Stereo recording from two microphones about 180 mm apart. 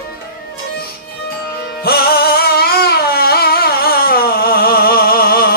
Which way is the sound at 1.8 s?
60° left (ahead or behind).